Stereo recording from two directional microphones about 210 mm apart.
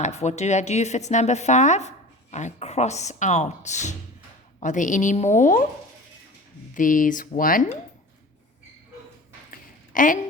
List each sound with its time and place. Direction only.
0.0 s speech: 30° left (ahead or behind)
6.7 s speech: 40° left (ahead or behind)
9.5 s a sound: 40° left (ahead or behind)